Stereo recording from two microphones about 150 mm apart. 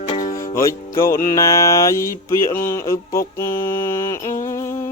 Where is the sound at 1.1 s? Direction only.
20° left (ahead or behind).